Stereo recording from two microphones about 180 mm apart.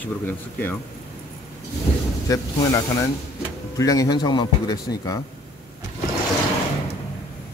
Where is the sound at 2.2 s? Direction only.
20° left (ahead or behind).